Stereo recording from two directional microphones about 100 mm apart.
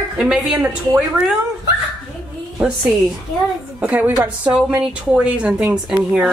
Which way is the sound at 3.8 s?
15° right (ahead or behind).